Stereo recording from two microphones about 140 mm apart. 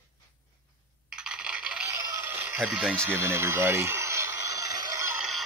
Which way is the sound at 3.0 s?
20° right (ahead or behind).